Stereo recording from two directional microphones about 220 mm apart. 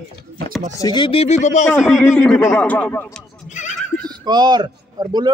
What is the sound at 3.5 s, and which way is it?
Neigh, 35° left (ahead or behind).